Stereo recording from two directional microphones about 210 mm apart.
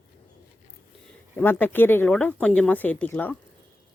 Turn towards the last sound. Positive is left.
turn(degrees=10)  # may be behind; listen again after turning